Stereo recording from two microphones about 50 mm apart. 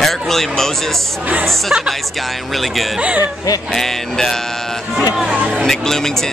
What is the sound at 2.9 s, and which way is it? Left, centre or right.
Speech, right.